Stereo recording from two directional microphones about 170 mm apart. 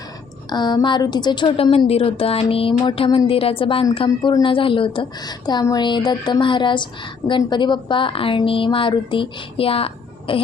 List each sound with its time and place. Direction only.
0.5 s a woman's voice: 25° left (ahead or behind)